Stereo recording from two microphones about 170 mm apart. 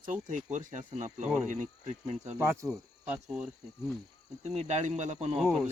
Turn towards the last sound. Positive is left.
turn(degrees=0)  # may be behind; listen again after turning